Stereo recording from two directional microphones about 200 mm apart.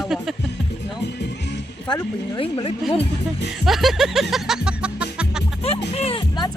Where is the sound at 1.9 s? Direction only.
20° left (ahead or behind).